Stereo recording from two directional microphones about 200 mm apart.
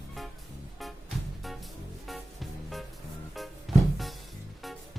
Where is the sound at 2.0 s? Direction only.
Centre (ahead or behind).